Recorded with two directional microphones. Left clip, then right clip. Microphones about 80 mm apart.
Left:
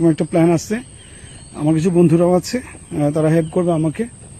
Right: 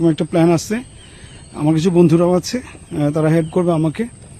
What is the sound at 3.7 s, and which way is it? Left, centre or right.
Speech, right.